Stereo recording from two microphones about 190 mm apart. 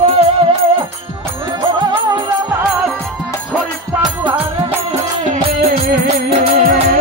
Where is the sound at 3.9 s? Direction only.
10° right (ahead or behind).